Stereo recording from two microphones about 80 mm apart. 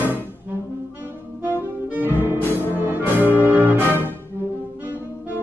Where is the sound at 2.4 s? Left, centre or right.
Left.